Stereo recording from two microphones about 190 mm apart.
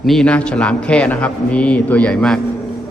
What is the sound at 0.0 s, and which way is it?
A man's voice, centre (ahead or behind).